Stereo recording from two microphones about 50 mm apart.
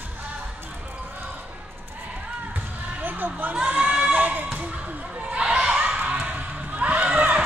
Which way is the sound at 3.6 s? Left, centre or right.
Right.